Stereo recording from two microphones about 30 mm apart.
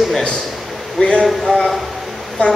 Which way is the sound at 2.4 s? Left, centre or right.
Left.